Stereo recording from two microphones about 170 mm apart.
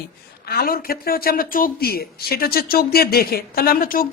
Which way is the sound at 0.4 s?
65° left (ahead or behind).